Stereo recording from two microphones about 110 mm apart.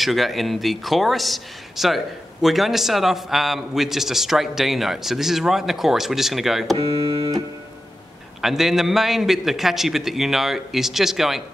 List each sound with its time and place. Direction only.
0.0 s a man's voice: centre (ahead or behind)
6.8 s music: 55° right (ahead or behind)
8.4 s a man's voice: centre (ahead or behind)